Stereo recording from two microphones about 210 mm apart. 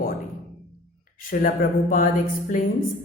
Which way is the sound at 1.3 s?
40° left (ahead or behind).